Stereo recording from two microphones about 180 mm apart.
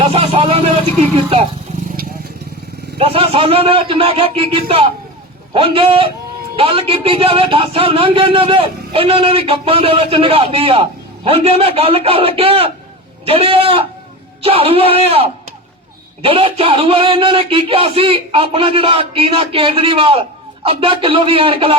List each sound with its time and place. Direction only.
0.1 s a man's voice: 30° right (ahead or behind)
3.0 s a man's voice: 30° right (ahead or behind)